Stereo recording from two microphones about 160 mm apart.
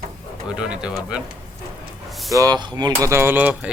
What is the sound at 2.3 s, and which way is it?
Speech, 20° right (ahead or behind).